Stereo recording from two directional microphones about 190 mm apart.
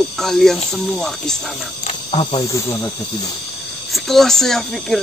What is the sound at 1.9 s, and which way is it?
Speech, 30° left (ahead or behind).